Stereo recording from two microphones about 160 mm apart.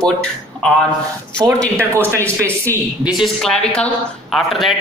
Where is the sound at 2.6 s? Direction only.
15° right (ahead or behind).